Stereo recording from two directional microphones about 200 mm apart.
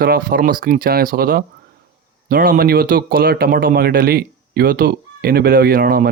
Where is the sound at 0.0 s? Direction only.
45° right (ahead or behind).